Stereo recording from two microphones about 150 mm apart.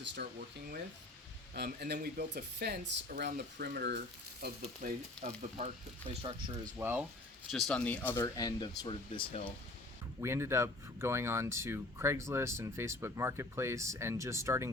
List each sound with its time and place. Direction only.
0.2 s speech: 90° right
4.4 s frying: 70° right (ahead or behind)
5.2 s speech: 55° right (ahead or behind)
6.1 s speech: 35° right (ahead or behind)
6.7 s speech: 15° right (ahead or behind)
7.5 s speech: 10° left (ahead or behind); by 9.5 s 35° left (ahead or behind)
10.2 s speech: 15° right (ahead or behind)